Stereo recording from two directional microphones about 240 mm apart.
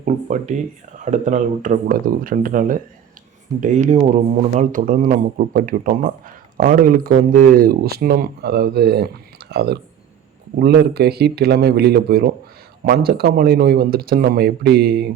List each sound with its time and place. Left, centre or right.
0.0 s speech: right